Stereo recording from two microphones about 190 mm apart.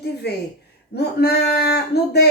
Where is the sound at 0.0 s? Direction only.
60° left (ahead or behind).